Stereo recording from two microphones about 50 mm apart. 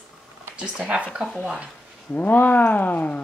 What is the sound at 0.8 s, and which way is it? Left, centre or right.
Speech, right.